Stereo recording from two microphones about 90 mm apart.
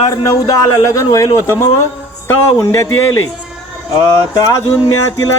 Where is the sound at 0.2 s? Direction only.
40° left (ahead or behind).